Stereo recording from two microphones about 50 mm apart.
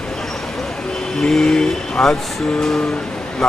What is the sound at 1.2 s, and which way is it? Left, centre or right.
Speech, centre.